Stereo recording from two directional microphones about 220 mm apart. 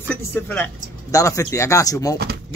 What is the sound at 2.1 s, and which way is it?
Speech, 45° right (ahead or behind).